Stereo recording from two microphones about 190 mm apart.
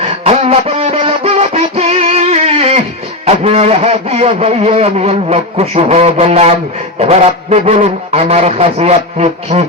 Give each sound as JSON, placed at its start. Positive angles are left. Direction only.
{"t": 0.0, "sound": "music", "side_deg": -35}
{"t": 3.2, "sound": "a man's voice", "side_deg": -35}